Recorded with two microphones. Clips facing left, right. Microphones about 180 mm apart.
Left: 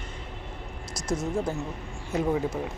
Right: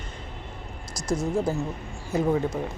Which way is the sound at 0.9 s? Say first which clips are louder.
Right 2 dB; 20° left (ahead or behind).